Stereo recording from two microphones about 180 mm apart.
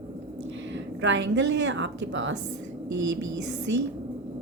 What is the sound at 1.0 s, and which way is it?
A woman's voice, 90° right.